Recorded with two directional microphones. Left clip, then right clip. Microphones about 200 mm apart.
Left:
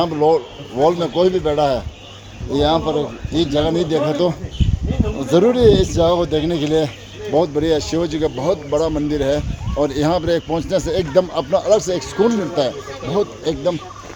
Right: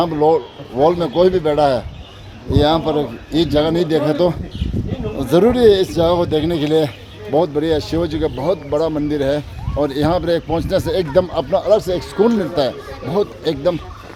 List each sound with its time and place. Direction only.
0.0 s speech: 20° right (ahead or behind)